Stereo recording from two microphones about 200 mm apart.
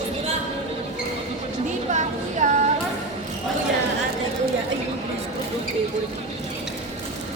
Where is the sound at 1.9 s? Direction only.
35° right (ahead or behind).